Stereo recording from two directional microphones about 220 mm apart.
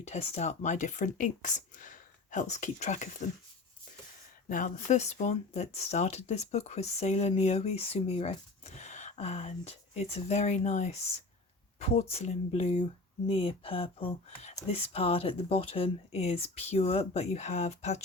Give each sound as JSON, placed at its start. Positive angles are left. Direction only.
{"t": 0.0, "sound": "speech", "side_deg": 30}
{"t": 4.4, "sound": "speech", "side_deg": 35}